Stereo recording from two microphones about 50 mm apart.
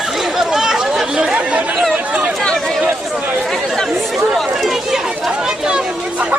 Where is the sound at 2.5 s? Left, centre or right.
Centre.